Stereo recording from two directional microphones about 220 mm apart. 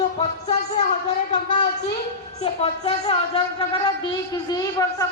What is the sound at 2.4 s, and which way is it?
A woman's voice, 25° left (ahead or behind).